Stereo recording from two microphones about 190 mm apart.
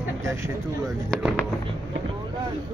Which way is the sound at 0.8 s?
Centre (ahead or behind).